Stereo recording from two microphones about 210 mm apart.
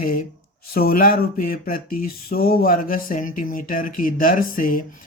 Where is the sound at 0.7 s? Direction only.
45° left (ahead or behind).